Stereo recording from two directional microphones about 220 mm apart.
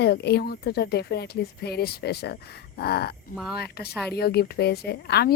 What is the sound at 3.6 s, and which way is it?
Speech, 45° left (ahead or behind).